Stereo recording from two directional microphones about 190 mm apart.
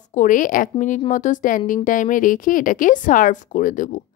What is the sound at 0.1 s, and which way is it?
Speech, 45° left (ahead or behind).